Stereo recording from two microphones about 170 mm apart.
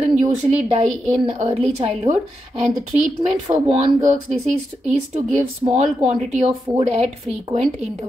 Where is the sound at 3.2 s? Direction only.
40° right (ahead or behind).